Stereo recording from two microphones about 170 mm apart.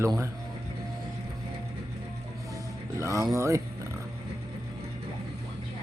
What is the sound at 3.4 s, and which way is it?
Speech, 15° right (ahead or behind).